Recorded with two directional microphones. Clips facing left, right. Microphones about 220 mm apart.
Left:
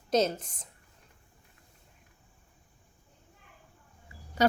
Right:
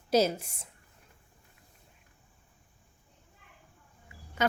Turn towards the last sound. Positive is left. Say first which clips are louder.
# left 4 dB
turn(degrees=35)  # may be behind; listen again after turning